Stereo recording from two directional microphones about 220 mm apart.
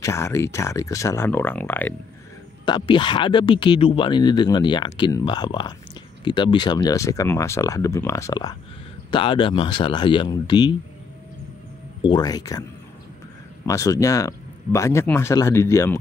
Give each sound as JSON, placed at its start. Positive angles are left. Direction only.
{"t": 0.0, "sound": "speech", "side_deg": 10}
{"t": 2.6, "sound": "speech", "side_deg": 20}
{"t": 12.0, "sound": "speech", "side_deg": 20}
{"t": 13.7, "sound": "speech", "side_deg": 15}